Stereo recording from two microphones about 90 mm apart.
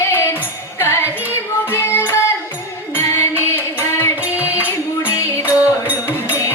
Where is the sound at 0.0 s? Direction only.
30° left (ahead or behind).